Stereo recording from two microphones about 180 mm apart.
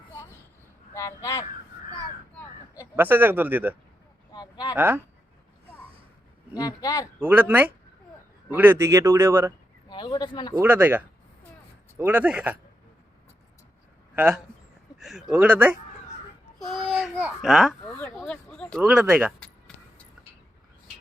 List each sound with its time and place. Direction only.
0.9 s speech: 15° left (ahead or behind)
2.9 s speech: 10° right (ahead or behind)
4.3 s a sound: 20° left (ahead or behind)
4.7 s speech: 10° right (ahead or behind)
6.6 s speech: 20° left (ahead or behind)
7.2 s speech: 10° right (ahead or behind)
9.9 s a man's voice: 25° left (ahead or behind)
10.6 s speech: 10° right (ahead or behind)
14.2 s a child's voice: 5° right (ahead or behind)
17.9 s speech: 10° left (ahead or behind)
18.2 s a sound: 5° left (ahead or behind)
18.8 s speech: 5° right (ahead or behind)